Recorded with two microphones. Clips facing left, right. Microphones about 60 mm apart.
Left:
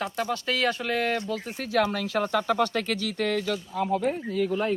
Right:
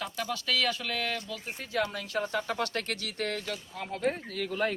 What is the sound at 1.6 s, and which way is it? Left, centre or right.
Speech, left.